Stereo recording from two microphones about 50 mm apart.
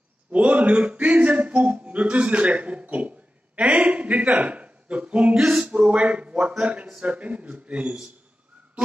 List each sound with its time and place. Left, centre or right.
0.3 s a man's voice: right